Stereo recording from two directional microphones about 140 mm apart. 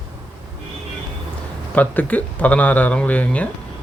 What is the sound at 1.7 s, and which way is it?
Speech, 10° left (ahead or behind).